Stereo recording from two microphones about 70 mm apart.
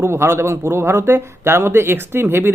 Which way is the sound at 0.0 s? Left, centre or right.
Right.